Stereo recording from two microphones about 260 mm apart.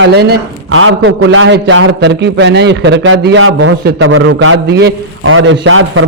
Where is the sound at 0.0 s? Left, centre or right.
Right.